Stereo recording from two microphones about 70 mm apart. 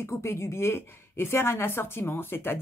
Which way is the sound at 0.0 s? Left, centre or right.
Left.